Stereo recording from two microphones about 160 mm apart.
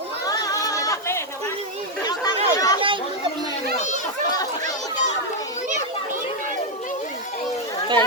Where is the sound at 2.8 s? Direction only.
30° right (ahead or behind).